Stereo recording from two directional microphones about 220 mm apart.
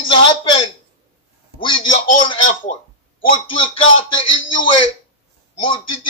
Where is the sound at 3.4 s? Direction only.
25° left (ahead or behind).